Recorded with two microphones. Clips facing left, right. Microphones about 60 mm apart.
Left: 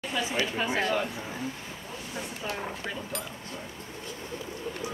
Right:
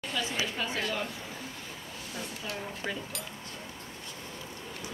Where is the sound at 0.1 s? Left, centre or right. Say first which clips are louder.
Left 4 dB; centre.